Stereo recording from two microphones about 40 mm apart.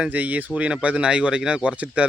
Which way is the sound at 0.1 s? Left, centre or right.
Right.